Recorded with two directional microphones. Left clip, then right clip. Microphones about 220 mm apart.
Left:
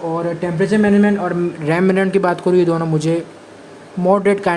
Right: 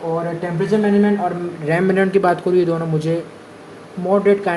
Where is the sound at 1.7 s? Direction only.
25° left (ahead or behind).